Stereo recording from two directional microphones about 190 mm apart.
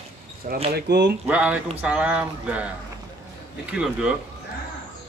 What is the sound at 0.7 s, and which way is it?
Speech, 60° right (ahead or behind).